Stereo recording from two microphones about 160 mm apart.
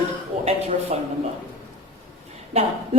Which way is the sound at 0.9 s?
45° right (ahead or behind).